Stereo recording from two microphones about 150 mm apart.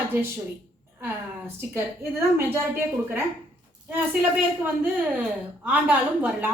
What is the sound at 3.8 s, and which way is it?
A woman's voice, 10° right (ahead or behind).